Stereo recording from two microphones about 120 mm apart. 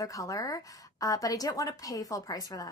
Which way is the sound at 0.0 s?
30° left (ahead or behind).